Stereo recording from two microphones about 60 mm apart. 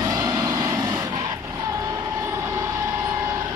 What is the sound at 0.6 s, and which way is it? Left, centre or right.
Vehicle, right.